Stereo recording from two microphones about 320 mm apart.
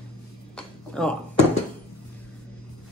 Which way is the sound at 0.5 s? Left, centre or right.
Centre.